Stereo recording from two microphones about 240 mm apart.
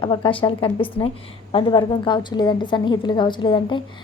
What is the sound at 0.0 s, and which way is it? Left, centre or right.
A woman's voice, left.